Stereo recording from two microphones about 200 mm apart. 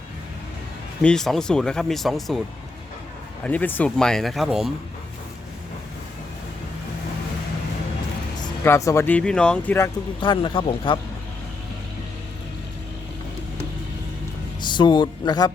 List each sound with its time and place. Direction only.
1.0 s speech: centre (ahead or behind)
3.4 s speech: 10° left (ahead or behind)
8.6 s speech: 15° left (ahead or behind)
10.2 s speech: 25° left (ahead or behind)
14.6 s speech: 20° left (ahead or behind)